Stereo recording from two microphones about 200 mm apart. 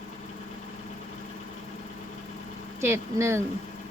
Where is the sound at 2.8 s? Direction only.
15° right (ahead or behind).